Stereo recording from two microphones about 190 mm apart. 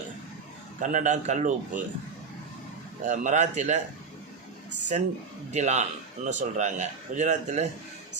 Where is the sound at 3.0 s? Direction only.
40° right (ahead or behind).